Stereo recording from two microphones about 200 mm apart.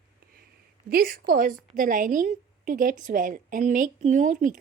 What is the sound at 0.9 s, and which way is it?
A woman's voice, 45° right (ahead or behind).